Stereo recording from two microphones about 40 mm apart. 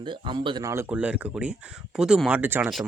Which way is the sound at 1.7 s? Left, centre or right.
Centre.